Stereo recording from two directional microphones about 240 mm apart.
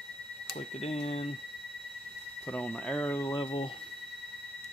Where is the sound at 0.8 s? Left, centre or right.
Left.